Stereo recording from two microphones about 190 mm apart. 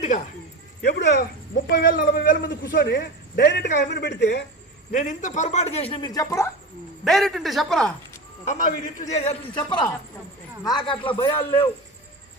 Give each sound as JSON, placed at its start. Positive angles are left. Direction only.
{"t": 0.8, "sound": "a man's voice", "side_deg": 60}
{"t": 4.9, "sound": "speech", "side_deg": 45}
{"t": 7.0, "sound": "speech", "side_deg": 0}
{"t": 8.4, "sound": "speech", "side_deg": 40}
{"t": 9.6, "sound": "a man's voice", "side_deg": 25}